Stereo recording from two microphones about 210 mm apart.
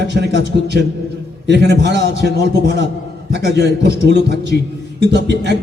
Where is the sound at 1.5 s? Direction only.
55° right (ahead or behind).